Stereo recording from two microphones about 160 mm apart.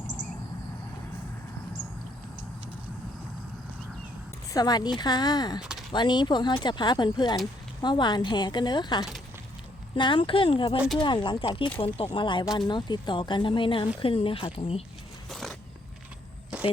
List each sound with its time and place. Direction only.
4.5 s speech: 25° left (ahead or behind)
5.5 s a sound: 5° right (ahead or behind)
5.9 s speech: 30° left (ahead or behind)
10.8 s speech: centre (ahead or behind)
11.0 s speech: 30° left (ahead or behind)
15.3 s a sound: centre (ahead or behind)